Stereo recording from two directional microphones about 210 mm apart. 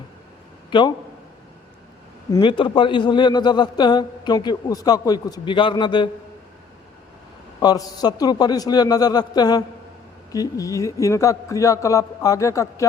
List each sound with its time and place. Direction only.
0.7 s a man's voice: 20° left (ahead or behind)
2.3 s a man's voice: 25° left (ahead or behind)
7.6 s a man's voice: 20° left (ahead or behind)